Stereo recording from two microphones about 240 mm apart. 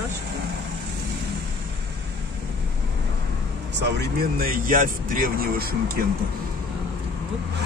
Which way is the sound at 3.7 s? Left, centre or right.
Right.